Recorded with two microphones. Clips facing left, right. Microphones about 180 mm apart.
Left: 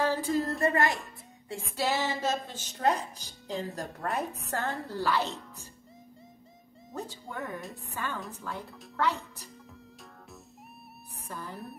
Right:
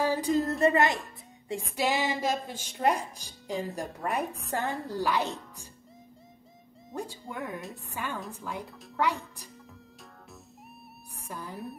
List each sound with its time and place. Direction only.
0.1 s a sound: 15° right (ahead or behind)
0.4 s speech: centre (ahead or behind)
0.7 s a child's voice: 20° right (ahead or behind)
7.0 s a woman's voice: 10° right (ahead or behind)
11.2 s a woman's voice: 15° right (ahead or behind)